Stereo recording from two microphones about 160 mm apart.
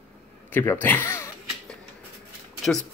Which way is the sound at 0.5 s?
10° left (ahead or behind).